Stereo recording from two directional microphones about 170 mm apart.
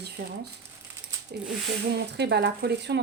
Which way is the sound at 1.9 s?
80° right.